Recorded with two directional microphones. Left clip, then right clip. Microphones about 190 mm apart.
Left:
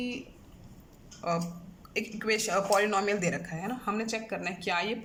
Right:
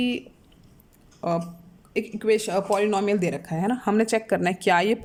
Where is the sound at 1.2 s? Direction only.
25° right (ahead or behind).